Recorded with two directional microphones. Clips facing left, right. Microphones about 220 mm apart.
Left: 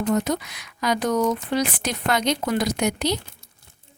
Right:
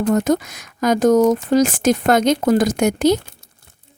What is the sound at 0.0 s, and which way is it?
Speech, 50° right (ahead or behind).